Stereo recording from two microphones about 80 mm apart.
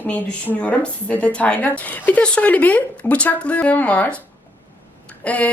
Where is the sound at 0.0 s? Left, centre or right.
Centre.